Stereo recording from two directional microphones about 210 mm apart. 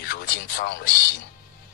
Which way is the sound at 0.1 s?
45° left (ahead or behind).